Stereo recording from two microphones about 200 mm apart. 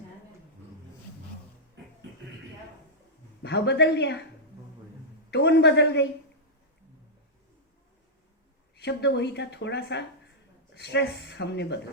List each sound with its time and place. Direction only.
3.4 s a woman's voice: 55° left (ahead or behind)
5.3 s a woman's voice: 55° left (ahead or behind)
8.7 s a woman's voice: 55° left (ahead or behind)